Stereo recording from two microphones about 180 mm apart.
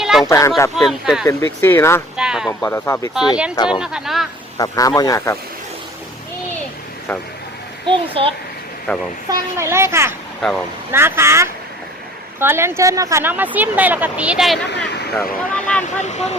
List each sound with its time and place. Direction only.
0.0 s a sound: centre (ahead or behind)
0.3 s speech: 15° left (ahead or behind)
0.8 s speech: centre (ahead or behind)
1.6 s speech: 15° left (ahead or behind)
2.1 s speech: 5° right (ahead or behind)
2.5 s speech: 15° left (ahead or behind)
3.2 s speech: 5° right (ahead or behind)
4.5 s a man's voice: 20° left (ahead or behind)
7.9 s a child's voice: 30° right (ahead or behind)
8.9 s speech: 5° left (ahead or behind)
9.6 s speech: 15° right (ahead or behind)
10.4 s speech: 5° left (ahead or behind)
10.9 s speech: 15° right (ahead or behind); by 15.8 s 5° left (ahead or behind)
16.0 s speech: 40° left (ahead or behind)